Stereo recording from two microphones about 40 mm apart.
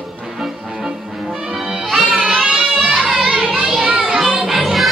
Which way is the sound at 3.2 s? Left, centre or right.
Right.